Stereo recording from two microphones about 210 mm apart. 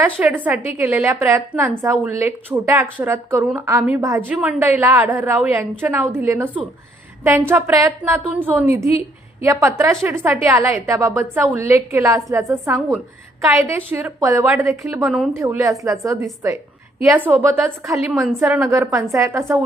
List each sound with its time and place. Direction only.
0.0 s a woman's voice: 10° right (ahead or behind)
18.1 s a woman's voice: centre (ahead or behind)
18.4 s a woman's voice: 10° right (ahead or behind)